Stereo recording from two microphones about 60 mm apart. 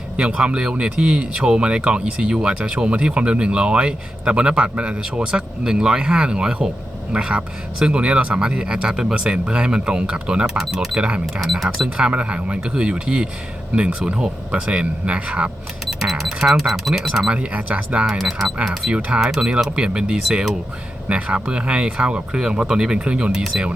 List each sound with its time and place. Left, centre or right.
0.2 s speech: centre
11.5 s speech: centre
11.9 s speech: centre
15.9 s speech: centre; by 18.0 s right
18.2 s speech: centre
18.9 s speech: right
19.2 s speech: centre
21.1 s speech: right